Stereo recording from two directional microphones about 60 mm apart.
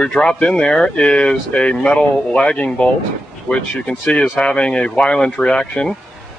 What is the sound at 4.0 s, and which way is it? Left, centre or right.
Speech, centre.